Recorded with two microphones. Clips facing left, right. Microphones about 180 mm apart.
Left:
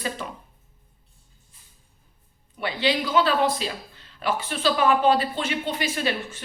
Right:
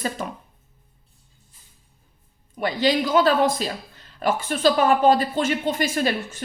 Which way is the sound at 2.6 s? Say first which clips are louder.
Right 4 dB; 45° right (ahead or behind).